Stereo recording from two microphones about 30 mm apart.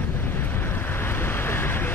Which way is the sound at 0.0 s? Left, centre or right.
Left.